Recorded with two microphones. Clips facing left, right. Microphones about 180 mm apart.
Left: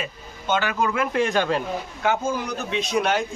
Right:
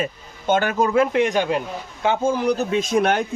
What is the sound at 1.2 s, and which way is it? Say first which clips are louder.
Speech: right 2 dB; 15° right (ahead or behind).